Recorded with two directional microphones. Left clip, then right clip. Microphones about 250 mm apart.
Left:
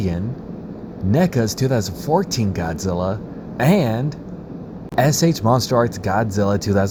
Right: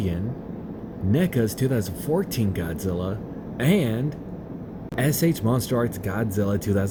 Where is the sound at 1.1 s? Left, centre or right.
Centre.